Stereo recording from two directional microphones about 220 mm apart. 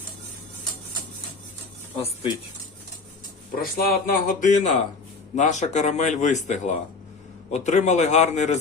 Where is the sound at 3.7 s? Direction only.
40° left (ahead or behind).